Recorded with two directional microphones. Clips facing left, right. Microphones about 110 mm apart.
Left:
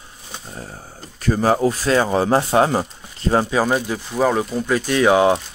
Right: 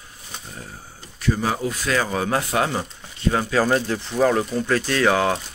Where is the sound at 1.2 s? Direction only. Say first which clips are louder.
Left 6 dB; 40° left (ahead or behind).